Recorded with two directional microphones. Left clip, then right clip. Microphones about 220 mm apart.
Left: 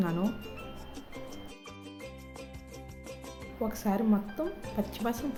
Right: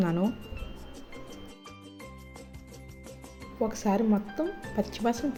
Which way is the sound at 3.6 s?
15° right (ahead or behind).